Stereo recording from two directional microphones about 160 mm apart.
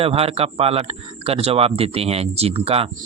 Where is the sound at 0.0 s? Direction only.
35° right (ahead or behind).